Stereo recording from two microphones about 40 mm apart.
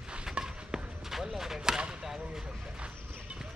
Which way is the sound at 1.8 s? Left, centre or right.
Right.